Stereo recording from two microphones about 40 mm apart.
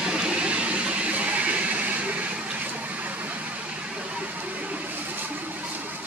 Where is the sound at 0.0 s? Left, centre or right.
Right.